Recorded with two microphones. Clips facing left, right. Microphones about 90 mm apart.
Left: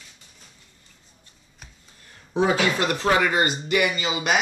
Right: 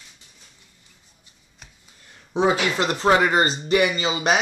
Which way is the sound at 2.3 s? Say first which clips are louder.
Right 1 dB; 25° right (ahead or behind).